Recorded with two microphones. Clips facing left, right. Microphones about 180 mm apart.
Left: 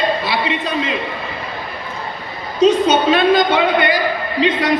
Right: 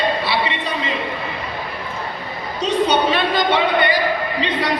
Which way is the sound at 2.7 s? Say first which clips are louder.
Left 3 dB; 45° left (ahead or behind).